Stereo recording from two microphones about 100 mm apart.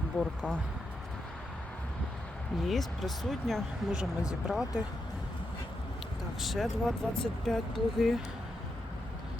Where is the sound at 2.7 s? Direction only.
Centre (ahead or behind).